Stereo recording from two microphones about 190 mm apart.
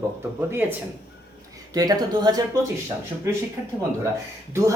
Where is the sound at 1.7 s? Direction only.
20° right (ahead or behind).